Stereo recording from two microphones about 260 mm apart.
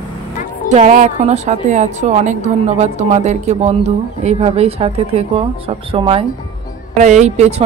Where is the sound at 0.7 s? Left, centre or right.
Right.